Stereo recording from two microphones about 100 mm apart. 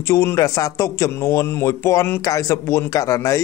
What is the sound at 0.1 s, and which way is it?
Speech, 30° left (ahead or behind).